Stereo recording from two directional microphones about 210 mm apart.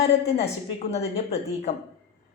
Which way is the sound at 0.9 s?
30° left (ahead or behind).